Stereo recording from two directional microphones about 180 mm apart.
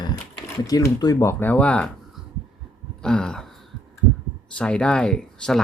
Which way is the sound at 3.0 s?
5° left (ahead or behind).